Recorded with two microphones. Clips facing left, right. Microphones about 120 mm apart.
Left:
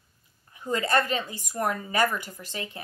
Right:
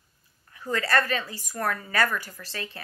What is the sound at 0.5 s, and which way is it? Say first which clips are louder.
A woman's voice: left 1 dB; 20° left (ahead or behind).